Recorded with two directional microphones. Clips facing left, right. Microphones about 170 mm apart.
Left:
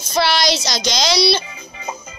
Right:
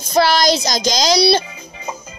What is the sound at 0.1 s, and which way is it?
Child singing, 45° right (ahead or behind).